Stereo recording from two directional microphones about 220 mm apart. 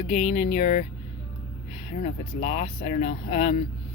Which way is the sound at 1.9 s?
30° left (ahead or behind).